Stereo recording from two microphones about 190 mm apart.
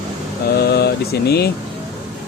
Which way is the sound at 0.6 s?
60° left (ahead or behind).